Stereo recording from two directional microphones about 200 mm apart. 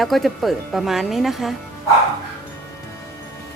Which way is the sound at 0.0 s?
Centre (ahead or behind).